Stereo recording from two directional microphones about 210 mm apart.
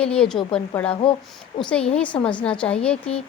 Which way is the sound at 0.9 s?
25° left (ahead or behind).